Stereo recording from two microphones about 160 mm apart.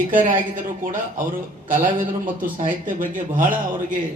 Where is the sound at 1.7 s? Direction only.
55° right (ahead or behind).